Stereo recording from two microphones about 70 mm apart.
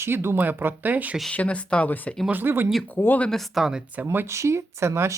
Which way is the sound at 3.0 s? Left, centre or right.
Left.